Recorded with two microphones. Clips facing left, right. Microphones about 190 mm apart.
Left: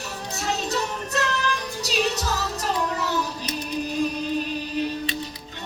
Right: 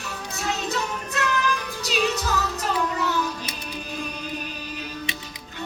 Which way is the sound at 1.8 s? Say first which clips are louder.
Even; 35° left (ahead or behind).